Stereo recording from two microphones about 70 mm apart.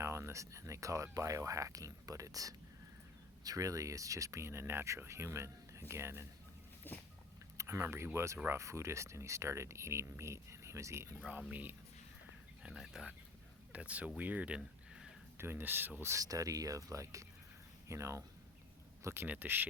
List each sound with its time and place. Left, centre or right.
0.0 s speech: right
6.8 s a sound: left
7.5 s speech: right
12.6 s speech: centre
13.7 s speech: centre
15.4 s speech: right
16.2 s speech: right
19.0 s speech: right